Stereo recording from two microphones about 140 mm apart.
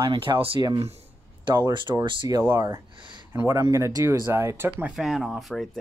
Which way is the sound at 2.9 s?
35° right (ahead or behind).